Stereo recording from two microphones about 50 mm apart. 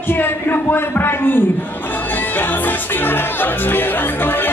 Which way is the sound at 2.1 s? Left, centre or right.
Left.